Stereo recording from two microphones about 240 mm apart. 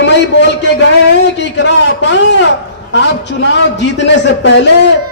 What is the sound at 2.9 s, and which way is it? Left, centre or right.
Speech, left.